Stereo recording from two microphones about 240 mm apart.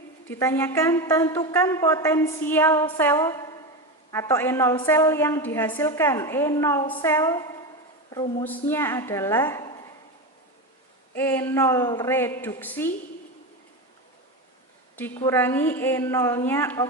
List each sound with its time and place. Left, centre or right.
0.3 s a woman's voice: centre
11.1 s a woman's voice: centre
14.9 s a woman's voice: centre